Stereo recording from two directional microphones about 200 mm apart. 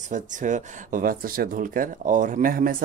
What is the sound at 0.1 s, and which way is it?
Speech, 40° right (ahead or behind).